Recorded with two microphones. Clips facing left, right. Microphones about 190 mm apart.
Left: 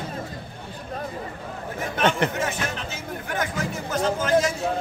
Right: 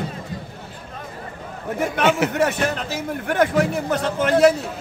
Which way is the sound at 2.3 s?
65° right (ahead or behind).